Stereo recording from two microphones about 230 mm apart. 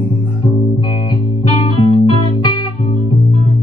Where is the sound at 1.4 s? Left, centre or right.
Left.